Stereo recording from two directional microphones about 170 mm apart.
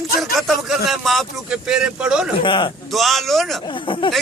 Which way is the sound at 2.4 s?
30° left (ahead or behind).